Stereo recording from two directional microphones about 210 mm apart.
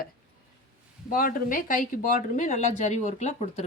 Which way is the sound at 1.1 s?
40° left (ahead or behind).